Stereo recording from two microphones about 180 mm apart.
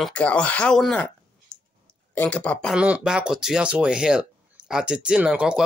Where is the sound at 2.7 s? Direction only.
5° right (ahead or behind).